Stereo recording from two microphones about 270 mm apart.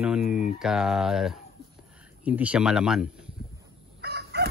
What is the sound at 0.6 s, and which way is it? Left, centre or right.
Speech, centre.